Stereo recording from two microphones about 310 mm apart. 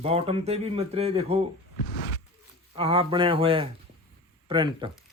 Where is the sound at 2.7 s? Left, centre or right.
Centre.